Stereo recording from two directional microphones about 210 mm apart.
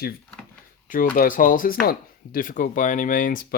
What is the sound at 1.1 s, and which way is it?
Speech, 40° left (ahead or behind).